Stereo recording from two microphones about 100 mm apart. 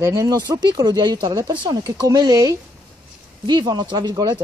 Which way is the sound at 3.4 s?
50° right (ahead or behind).